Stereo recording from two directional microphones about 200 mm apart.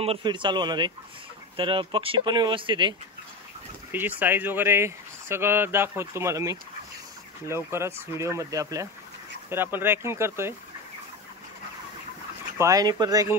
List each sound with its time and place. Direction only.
0.0 s speech: 25° right (ahead or behind)
3.9 s speech: 10° right (ahead or behind)
12.5 s speech: 15° right (ahead or behind)